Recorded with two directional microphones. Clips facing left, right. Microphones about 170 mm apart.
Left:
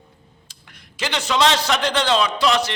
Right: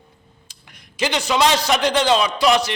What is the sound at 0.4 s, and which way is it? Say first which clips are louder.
A man's voice: even; 15° right (ahead or behind).